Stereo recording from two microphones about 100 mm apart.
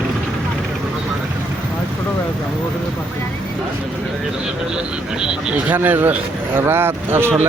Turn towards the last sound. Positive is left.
turn(degrees=-20)  # may be behind; listen again after turning